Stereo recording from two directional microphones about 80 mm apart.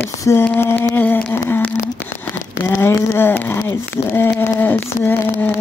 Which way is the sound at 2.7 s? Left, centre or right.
Left.